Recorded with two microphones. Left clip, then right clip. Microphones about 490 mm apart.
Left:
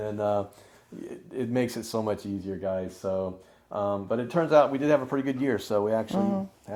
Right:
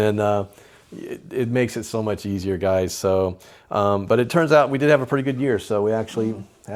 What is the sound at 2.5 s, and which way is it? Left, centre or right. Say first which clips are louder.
Speech: right 11 dB; right.